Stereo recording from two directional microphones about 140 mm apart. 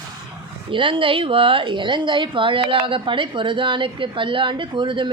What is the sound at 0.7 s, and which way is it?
A woman's voice, 35° right (ahead or behind).